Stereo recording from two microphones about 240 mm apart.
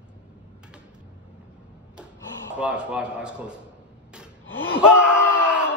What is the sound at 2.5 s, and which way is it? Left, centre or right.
Speech, centre.